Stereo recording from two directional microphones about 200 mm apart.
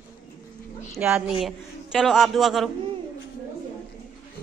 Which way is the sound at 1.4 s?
Centre (ahead or behind).